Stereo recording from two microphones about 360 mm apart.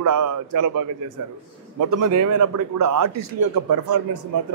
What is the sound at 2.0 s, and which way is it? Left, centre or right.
A man's voice, right.